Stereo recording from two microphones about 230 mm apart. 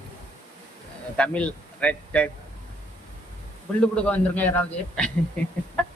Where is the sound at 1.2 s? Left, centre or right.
Centre.